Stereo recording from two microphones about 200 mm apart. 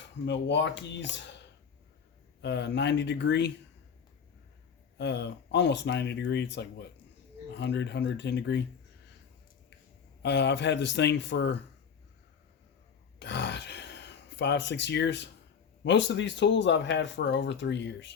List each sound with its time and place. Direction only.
0.3 s speech: 60° left (ahead or behind)
2.4 s speech: 60° left (ahead or behind)
4.9 s speech: 60° left (ahead or behind)
10.2 s speech: 60° left (ahead or behind)
13.1 s gasp: 60° left (ahead or behind)
15.8 s speech: 65° left (ahead or behind)